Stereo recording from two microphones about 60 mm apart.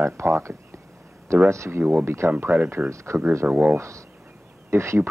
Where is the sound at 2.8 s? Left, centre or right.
Right.